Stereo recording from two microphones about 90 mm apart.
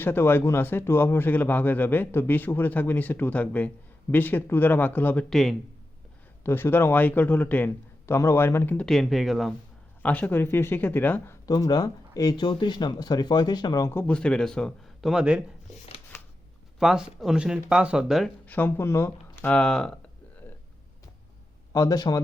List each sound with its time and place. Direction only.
0.0 s speech: 25° left (ahead or behind)
5.3 s speech: centre (ahead or behind)
6.4 s speech: 25° left (ahead or behind)
8.9 s speech: centre (ahead or behind)
10.0 s speech: 20° left (ahead or behind)
11.4 s speech: 45° left (ahead or behind)
12.4 s speech: 60° left (ahead or behind)
14.1 s a man's voice: 10° left (ahead or behind)
15.1 s speech: 10° right (ahead or behind)
16.1 s shuffling cards: 30° left (ahead or behind)
16.8 s speech: 5° right (ahead or behind)
18.4 s speech: 20° left (ahead or behind)
19.5 s speech: 5° left (ahead or behind)
21.7 s speech: 45° left (ahead or behind)